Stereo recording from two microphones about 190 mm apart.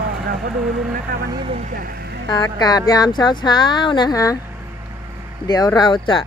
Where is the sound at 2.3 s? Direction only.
20° left (ahead or behind).